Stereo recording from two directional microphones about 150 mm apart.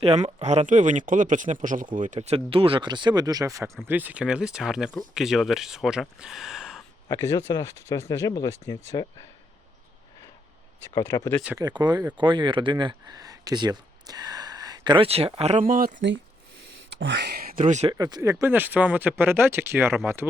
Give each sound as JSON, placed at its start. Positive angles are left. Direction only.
{"t": 0.0, "sound": "speech", "side_deg": -40}
{"t": 7.1, "sound": "speech", "side_deg": 20}
{"t": 10.9, "sound": "speech", "side_deg": 20}
{"t": 11.5, "sound": "speech", "side_deg": -25}
{"t": 15.6, "sound": "speech", "side_deg": -65}
{"t": 16.9, "sound": "a sound", "side_deg": -90}
{"t": 17.7, "sound": "speech", "side_deg": -50}
{"t": 17.9, "sound": "speech", "side_deg": -25}